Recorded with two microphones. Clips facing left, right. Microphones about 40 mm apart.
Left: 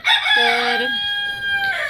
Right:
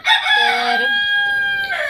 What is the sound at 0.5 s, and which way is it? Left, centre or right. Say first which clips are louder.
Speech: right 2 dB; left.